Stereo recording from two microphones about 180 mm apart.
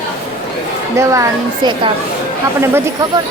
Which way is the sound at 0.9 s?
15° right (ahead or behind).